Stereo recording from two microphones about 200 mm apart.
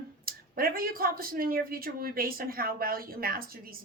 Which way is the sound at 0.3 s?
45° right (ahead or behind).